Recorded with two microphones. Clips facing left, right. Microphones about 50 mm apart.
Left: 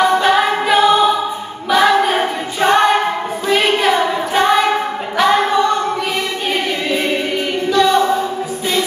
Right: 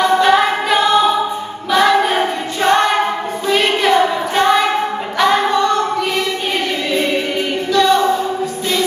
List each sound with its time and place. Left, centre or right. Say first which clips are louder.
0.0 s music: right 1 dB; centre
1.7 s a capella: even; centre
3.4 s child singing: even; centre
5.2 s a sound: even; centre
6.9 s choir: right 1 dB; centre